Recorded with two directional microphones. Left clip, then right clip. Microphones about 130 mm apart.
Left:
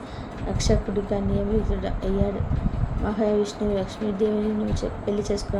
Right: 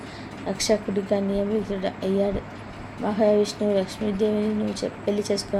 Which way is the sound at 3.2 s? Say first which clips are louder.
Right 3 dB; 25° right (ahead or behind).